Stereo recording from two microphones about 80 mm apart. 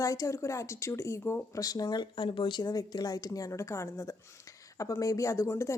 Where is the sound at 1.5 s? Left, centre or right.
Left.